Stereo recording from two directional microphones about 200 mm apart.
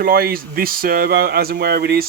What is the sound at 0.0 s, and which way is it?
Speech, 50° right (ahead or behind).